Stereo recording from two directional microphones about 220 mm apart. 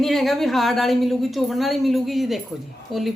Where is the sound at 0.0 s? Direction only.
Centre (ahead or behind).